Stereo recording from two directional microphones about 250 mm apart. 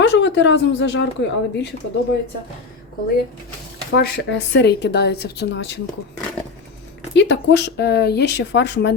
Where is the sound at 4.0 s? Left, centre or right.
Left.